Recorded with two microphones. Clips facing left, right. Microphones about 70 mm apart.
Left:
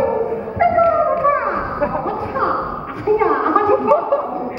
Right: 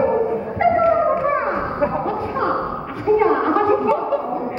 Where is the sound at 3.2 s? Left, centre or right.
Centre.